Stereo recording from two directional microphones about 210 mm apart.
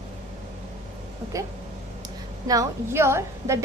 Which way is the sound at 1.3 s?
15° right (ahead or behind).